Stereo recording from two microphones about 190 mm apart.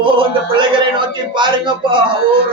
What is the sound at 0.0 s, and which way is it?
A man's voice, 25° right (ahead or behind).